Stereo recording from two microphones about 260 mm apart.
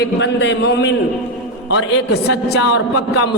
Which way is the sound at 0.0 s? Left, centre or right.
Left.